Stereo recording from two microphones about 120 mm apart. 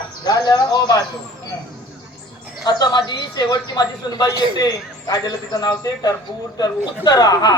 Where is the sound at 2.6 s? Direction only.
35° left (ahead or behind).